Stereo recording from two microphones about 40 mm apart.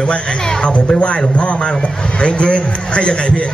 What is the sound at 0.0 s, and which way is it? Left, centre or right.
A man's voice, left.